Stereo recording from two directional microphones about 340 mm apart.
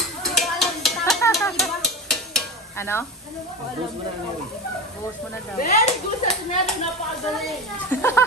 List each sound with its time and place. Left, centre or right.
0.2 s a sound: centre
5.6 s speech: left
7.9 s speech: centre